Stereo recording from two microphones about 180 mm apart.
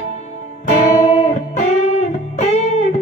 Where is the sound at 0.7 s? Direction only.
40° left (ahead or behind).